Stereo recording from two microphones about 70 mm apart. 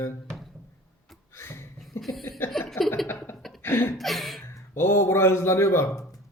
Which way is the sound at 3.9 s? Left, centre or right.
Centre.